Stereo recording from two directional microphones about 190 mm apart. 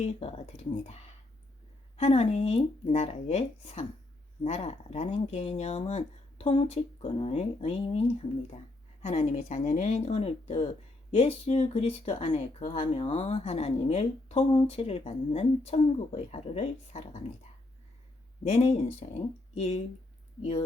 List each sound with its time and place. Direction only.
0.0 s speech: 30° left (ahead or behind)
2.0 s speech: 35° left (ahead or behind)
18.4 s speech: 35° left (ahead or behind)